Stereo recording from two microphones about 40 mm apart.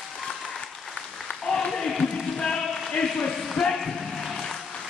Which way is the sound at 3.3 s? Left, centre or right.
Centre.